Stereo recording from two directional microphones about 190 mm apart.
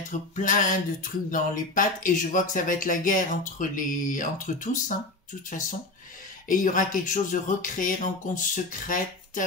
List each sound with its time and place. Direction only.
0.4 s speech: 45° left (ahead or behind)
6.5 s speech: 45° left (ahead or behind)